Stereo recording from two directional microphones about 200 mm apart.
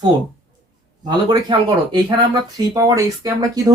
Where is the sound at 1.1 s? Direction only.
25° right (ahead or behind).